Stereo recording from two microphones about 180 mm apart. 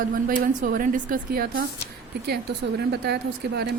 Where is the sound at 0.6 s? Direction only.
45° right (ahead or behind).